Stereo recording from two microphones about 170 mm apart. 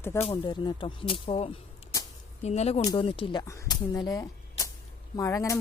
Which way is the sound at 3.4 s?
20° left (ahead or behind).